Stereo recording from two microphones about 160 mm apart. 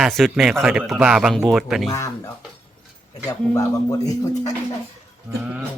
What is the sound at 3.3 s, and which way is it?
Speech, 20° left (ahead or behind).